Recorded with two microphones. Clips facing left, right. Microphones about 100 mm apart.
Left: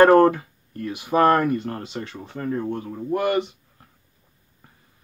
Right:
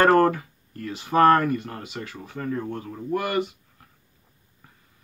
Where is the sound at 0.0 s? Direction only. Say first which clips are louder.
Left 4 dB; 20° left (ahead or behind).